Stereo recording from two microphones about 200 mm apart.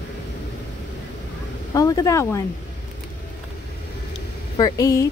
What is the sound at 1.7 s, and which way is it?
Speech, 15° left (ahead or behind).